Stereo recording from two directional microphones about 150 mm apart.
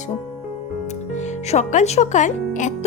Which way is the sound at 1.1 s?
50° left (ahead or behind).